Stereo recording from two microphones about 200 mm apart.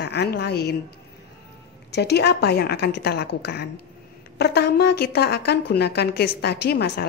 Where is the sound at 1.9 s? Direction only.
55° left (ahead or behind).